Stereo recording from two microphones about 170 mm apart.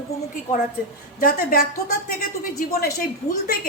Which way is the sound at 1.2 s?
60° left (ahead or behind).